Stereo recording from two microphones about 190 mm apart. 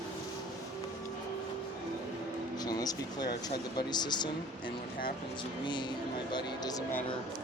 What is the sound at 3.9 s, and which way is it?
Speech, 20° left (ahead or behind).